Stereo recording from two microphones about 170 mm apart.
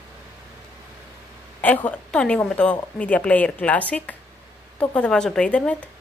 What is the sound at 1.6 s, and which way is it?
A woman's voice, 10° left (ahead or behind).